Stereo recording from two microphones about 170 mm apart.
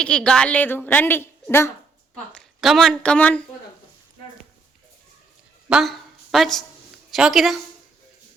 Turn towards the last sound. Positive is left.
turn(degrees=0)  # may be behind; listen again after turning